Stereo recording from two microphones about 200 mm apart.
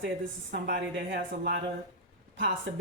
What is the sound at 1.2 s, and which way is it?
Speech, 45° right (ahead or behind).